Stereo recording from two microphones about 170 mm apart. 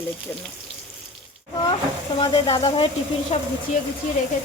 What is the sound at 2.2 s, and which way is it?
Speech, 35° left (ahead or behind).